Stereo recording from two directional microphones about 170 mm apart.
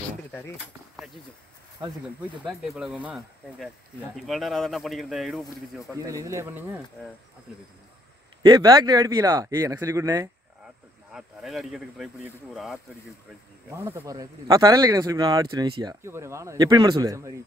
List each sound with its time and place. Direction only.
0.9 s speech: centre (ahead or behind)
2.4 s a man's voice: centre (ahead or behind)
5.9 s speech: 20° right (ahead or behind)
8.4 s speech: 25° right (ahead or behind)
11.1 s a man's voice: centre (ahead or behind)
13.7 s speech: 15° right (ahead or behind)